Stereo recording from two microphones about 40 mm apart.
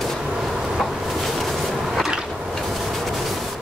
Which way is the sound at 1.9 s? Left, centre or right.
Centre.